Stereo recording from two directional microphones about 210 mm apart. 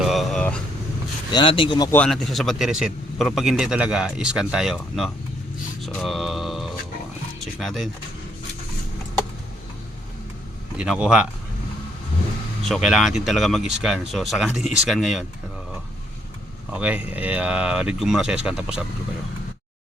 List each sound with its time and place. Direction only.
0.0 s vehicle: centre (ahead or behind)
1.3 s speech: 25° left (ahead or behind)
1.9 s speech: 5° left (ahead or behind)
7.3 s a sound: centre (ahead or behind)
10.8 s speech: 5° right (ahead or behind)
12.6 s speech: centre (ahead or behind)
16.7 s speech: 5° right (ahead or behind)